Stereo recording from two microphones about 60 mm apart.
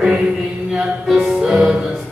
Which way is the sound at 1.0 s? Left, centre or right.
Centre.